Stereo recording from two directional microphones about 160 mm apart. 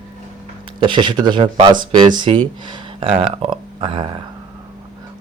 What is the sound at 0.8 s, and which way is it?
Speech, 30° right (ahead or behind).